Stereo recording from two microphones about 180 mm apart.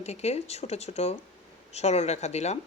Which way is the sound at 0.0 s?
35° left (ahead or behind).